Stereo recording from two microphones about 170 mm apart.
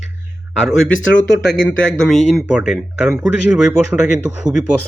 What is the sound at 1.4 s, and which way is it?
Speech, 90° left.